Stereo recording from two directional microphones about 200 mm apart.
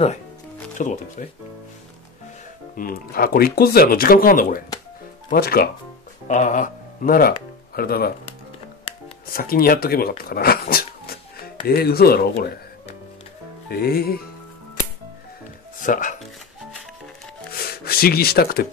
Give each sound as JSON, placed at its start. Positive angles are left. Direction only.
{"t": 0.7, "sound": "speech", "side_deg": 40}
{"t": 2.7, "sound": "speech", "side_deg": 45}
{"t": 6.2, "sound": "speech", "side_deg": 35}
{"t": 9.3, "sound": "speech", "side_deg": 45}
{"t": 13.7, "sound": "speech", "side_deg": 50}
{"t": 15.8, "sound": "speech", "side_deg": 40}
{"t": 17.6, "sound": "a sound", "side_deg": 50}